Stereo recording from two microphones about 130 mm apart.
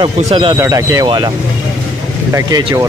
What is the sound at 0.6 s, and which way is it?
Speech, 25° right (ahead or behind).